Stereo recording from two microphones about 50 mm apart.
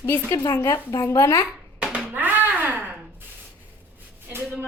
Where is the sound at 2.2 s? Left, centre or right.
Right.